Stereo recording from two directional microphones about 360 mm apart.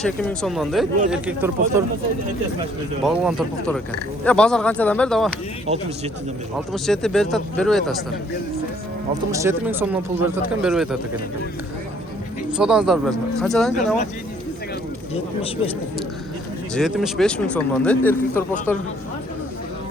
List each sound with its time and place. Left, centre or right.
0.0 s speech: centre
3.0 s speech: centre
6.8 s speech: centre
9.3 s speech: centre
12.5 s speech: centre
15.1 s speech: centre
16.7 s speech: centre